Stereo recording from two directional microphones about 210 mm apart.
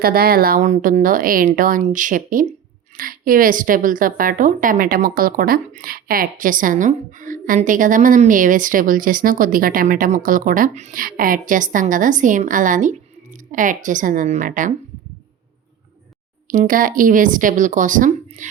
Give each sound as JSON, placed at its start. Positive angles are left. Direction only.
{"t": 0.0, "sound": "a woman's voice", "side_deg": -45}
{"t": 16.5, "sound": "a woman's voice", "side_deg": -40}